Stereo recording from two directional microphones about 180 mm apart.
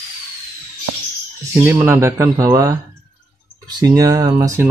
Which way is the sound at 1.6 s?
15° right (ahead or behind).